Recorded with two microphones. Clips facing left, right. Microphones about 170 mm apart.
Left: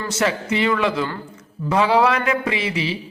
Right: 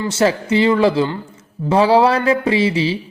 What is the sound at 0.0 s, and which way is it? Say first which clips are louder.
A man's voice: right 5 dB; 30° right (ahead or behind).